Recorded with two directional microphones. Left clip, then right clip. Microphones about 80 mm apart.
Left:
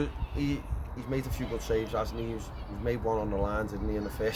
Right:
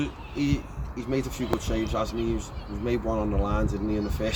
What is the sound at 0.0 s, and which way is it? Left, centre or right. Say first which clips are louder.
Speech: right 4 dB; left.